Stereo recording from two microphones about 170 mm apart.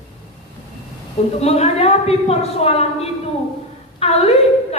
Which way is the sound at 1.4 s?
35° left (ahead or behind).